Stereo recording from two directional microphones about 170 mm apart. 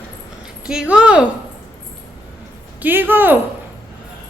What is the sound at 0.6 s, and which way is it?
Speech, 5° right (ahead or behind).